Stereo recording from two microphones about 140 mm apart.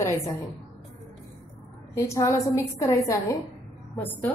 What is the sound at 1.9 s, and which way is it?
A woman's voice, 20° left (ahead or behind).